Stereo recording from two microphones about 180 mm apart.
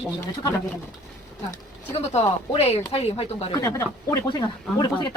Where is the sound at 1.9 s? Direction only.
35° left (ahead or behind).